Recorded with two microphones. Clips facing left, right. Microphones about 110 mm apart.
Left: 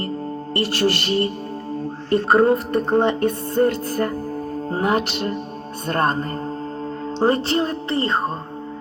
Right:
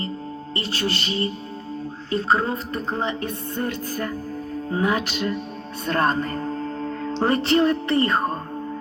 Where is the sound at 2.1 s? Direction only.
60° left (ahead or behind).